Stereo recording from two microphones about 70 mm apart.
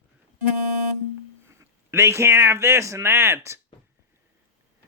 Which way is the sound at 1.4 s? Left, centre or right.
Right.